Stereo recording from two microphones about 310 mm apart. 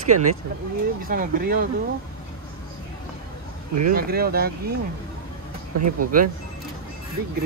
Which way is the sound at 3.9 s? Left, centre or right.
Right.